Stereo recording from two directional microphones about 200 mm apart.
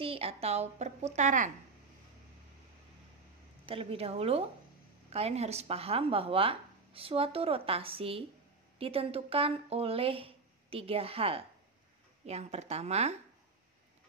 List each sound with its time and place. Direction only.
0.0 s a woman's voice: 30° right (ahead or behind)
3.6 s a woman's voice: 30° right (ahead or behind)